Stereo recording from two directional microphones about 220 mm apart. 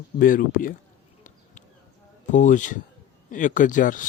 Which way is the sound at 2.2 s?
35° left (ahead or behind).